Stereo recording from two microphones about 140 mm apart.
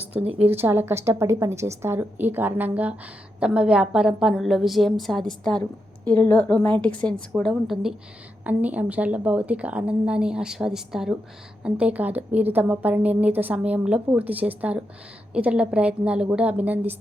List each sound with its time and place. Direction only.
0.3 s a woman's voice: 15° right (ahead or behind)